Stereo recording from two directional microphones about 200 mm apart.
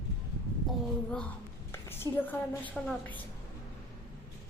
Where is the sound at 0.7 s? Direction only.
5° left (ahead or behind).